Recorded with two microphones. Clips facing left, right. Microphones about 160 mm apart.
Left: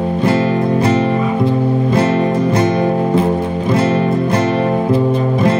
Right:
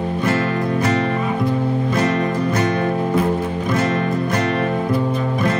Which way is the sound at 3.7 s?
30° left (ahead or behind).